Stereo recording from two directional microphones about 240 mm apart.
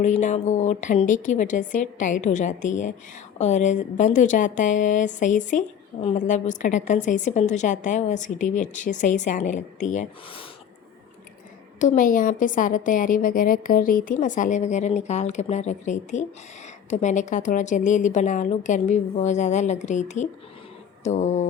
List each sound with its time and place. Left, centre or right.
0.0 s a woman's voice: left
11.8 s a woman's voice: left
21.0 s a sound: left